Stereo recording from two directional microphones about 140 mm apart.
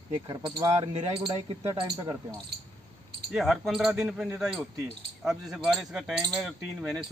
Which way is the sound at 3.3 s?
Centre (ahead or behind).